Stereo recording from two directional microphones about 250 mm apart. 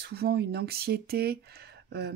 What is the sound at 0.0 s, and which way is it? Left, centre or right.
Speech, right.